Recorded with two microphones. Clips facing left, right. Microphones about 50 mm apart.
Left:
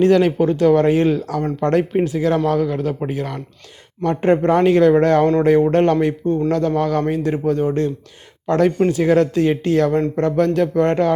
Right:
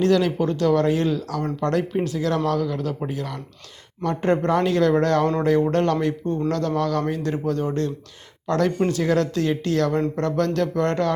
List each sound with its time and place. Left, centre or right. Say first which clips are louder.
0.0 s speech: left 5 dB; left